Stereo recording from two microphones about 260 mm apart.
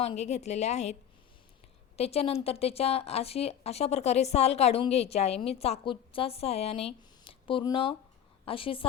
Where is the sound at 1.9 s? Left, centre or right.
Left.